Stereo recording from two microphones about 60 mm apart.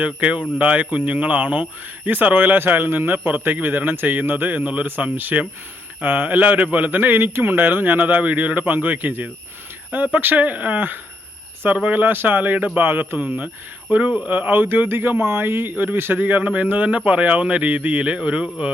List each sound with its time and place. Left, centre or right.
0.0 s a man's voice: right